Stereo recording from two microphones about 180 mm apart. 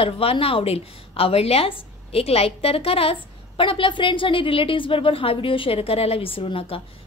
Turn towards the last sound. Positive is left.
turn(degrees=30)  # may be behind; listen again after turning